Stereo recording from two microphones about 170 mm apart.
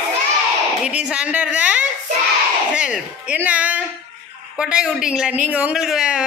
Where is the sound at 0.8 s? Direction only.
5° right (ahead or behind).